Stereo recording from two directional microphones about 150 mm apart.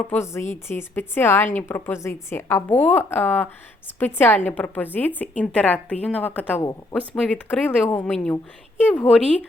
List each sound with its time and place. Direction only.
0.1 s a woman's voice: 15° left (ahead or behind)